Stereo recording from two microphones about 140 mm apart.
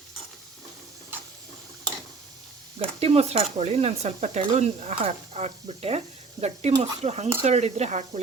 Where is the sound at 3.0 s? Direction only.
45° right (ahead or behind).